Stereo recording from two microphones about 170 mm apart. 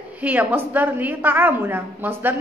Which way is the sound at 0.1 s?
10° right (ahead or behind).